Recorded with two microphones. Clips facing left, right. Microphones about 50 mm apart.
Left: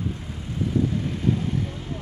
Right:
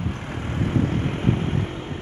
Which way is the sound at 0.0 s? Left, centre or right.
Right.